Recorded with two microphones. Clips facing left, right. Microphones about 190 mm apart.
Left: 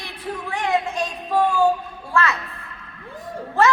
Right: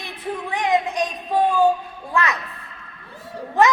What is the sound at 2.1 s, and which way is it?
Speech, 15° right (ahead or behind).